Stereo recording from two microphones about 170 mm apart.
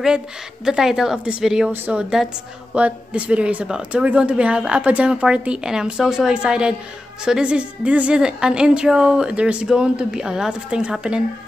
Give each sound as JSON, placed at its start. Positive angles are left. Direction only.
{"t": 0.7, "sound": "a woman's voice", "side_deg": -5}